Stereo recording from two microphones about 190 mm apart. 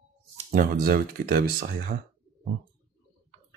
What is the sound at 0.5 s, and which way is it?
Speech, 50° right (ahead or behind).